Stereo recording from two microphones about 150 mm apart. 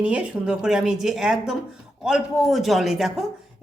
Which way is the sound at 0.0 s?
10° right (ahead or behind).